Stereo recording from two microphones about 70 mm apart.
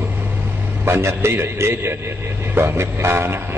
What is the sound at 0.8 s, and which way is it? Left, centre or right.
Speech, right.